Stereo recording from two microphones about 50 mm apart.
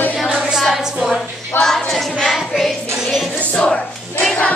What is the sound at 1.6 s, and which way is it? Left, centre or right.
Choir, centre.